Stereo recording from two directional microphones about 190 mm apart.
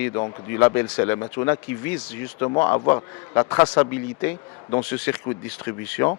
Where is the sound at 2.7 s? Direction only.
20° left (ahead or behind).